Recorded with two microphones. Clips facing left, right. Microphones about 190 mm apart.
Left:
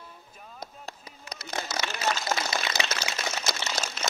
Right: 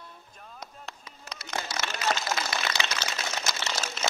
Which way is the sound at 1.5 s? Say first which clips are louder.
Left 1 dB; 35° left (ahead or behind).